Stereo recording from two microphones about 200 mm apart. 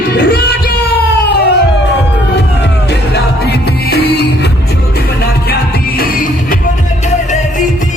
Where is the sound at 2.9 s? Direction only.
55° left (ahead or behind).